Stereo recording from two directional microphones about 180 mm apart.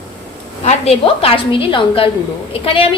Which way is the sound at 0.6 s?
35° left (ahead or behind).